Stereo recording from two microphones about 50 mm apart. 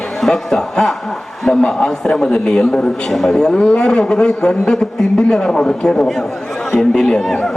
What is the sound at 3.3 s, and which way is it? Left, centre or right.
A man's voice, centre.